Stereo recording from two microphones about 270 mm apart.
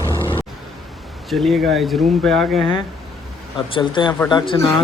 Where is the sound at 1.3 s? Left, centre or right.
Centre.